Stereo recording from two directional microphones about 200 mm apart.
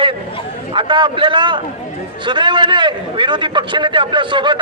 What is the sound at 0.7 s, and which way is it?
A man's voice, 25° right (ahead or behind).